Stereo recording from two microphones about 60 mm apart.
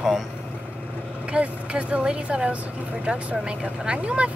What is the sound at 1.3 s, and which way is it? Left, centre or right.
Speech, centre.